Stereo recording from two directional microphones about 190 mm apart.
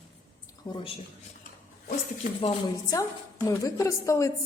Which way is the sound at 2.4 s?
20° left (ahead or behind).